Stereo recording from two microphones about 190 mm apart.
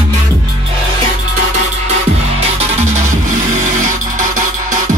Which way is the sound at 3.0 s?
40° right (ahead or behind).